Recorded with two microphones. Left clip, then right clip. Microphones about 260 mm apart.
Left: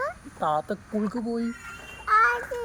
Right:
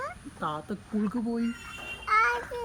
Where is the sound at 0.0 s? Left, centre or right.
Centre.